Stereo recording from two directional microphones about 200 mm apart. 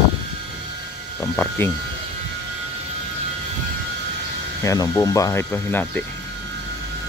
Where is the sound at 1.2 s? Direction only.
10° left (ahead or behind).